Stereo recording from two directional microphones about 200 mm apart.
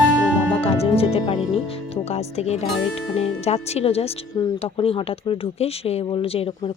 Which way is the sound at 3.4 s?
30° left (ahead or behind).